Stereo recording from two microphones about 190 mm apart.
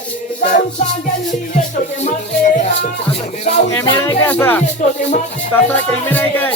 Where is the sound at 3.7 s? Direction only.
15° left (ahead or behind).